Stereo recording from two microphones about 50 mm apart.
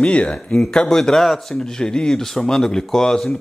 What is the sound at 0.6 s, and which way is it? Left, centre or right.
Speech, centre.